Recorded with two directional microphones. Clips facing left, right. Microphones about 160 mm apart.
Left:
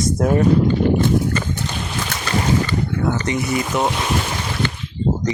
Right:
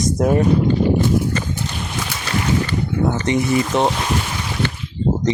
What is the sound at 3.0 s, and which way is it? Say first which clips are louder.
Speech: right 5 dB; 20° right (ahead or behind).